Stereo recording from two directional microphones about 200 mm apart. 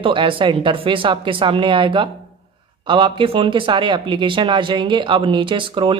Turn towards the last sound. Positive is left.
turn(degrees=-25)  # may be behind; listen again after turning